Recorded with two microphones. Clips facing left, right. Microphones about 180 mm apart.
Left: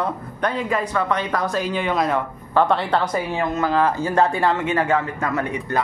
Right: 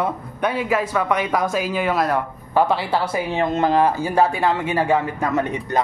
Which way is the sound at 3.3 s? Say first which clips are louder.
Right 5 dB; 25° right (ahead or behind).